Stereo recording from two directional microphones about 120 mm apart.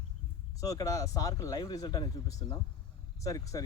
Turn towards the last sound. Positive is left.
turn(degrees=30)  # may be behind; listen again after turning